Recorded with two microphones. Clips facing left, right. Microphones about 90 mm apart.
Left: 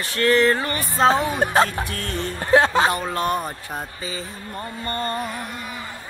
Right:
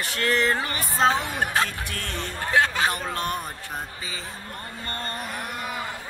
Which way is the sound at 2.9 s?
5° left (ahead or behind).